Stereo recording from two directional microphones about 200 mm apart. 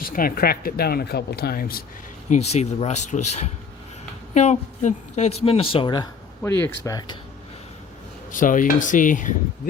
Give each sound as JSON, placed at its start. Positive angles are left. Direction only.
{"t": 0.1, "sound": "speech", "side_deg": 45}
{"t": 2.3, "sound": "a woman's voice", "side_deg": 35}
{"t": 8.3, "sound": "speech", "side_deg": 40}